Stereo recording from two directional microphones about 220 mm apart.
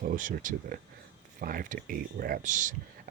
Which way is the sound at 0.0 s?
35° right (ahead or behind).